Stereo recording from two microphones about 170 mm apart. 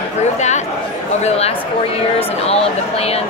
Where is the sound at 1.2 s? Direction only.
40° left (ahead or behind).